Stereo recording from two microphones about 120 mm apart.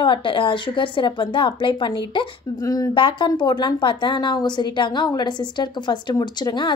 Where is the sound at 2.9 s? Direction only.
40° left (ahead or behind).